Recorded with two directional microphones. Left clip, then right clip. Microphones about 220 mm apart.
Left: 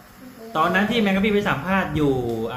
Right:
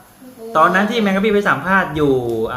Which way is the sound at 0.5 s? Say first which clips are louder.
Right 6 dB; 15° right (ahead or behind).